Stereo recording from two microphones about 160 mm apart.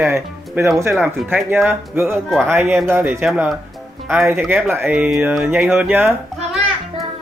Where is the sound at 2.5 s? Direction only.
15° right (ahead or behind).